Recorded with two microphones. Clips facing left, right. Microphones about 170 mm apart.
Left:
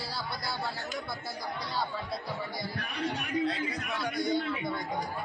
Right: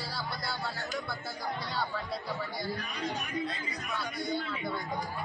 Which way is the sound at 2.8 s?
65° left (ahead or behind).